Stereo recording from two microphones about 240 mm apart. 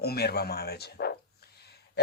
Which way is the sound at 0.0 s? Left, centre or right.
Left.